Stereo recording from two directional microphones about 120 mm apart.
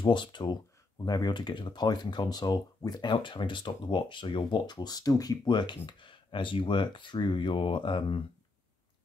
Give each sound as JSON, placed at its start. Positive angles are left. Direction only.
{"t": 0.0, "sound": "speech", "side_deg": 40}